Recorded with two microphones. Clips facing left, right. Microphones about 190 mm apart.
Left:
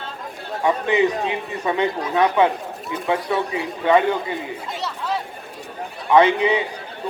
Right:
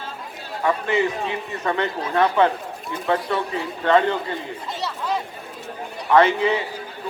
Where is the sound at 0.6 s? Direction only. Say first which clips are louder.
Left 3 dB; 15° left (ahead or behind).